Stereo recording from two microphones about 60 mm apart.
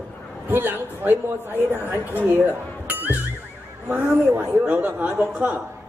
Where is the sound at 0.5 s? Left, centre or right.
Right.